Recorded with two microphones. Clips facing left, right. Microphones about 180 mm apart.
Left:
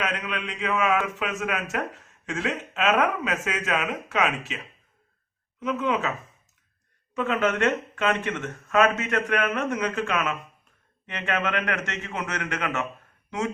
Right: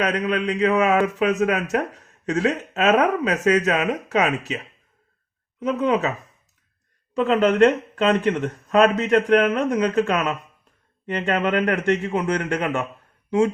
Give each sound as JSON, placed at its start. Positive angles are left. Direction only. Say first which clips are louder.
{"t": 0.0, "sound": "speech", "louder": "right 8 dB", "side_deg": -40}
{"t": 5.5, "sound": "speech", "louder": "right 5 dB", "side_deg": -35}
{"t": 7.1, "sound": "speech", "louder": "right 6 dB", "side_deg": -35}